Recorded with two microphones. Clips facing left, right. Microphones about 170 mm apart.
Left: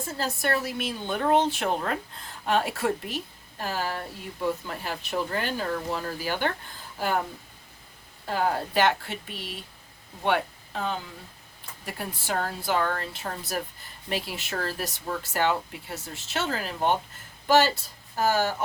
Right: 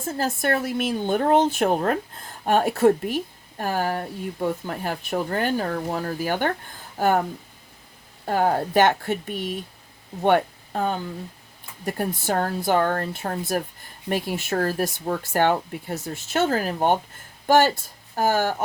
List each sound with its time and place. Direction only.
0.2 s a woman's voice: 50° right (ahead or behind)
8.2 s a woman's voice: 50° right (ahead or behind)